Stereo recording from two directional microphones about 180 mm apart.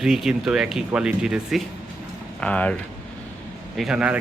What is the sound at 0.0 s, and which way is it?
Speech, centre (ahead or behind).